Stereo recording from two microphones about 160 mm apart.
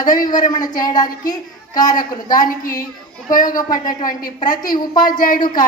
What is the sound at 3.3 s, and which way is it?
Speech, 55° left (ahead or behind).